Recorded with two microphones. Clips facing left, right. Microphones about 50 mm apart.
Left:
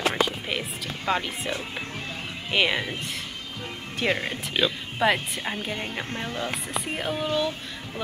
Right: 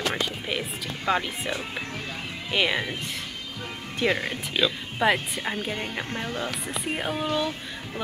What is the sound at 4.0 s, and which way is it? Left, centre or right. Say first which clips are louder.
Speech: right 1 dB; left.